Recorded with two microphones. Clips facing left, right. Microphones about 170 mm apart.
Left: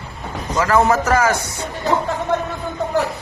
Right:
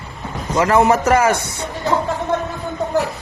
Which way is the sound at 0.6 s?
25° right (ahead or behind).